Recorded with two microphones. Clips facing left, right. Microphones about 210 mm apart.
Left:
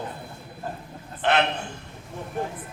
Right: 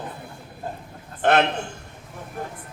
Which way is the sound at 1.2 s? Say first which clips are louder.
Right 4 dB; 50° right (ahead or behind).